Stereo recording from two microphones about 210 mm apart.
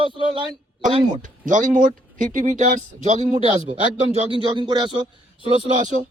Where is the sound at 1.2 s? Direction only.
40° right (ahead or behind).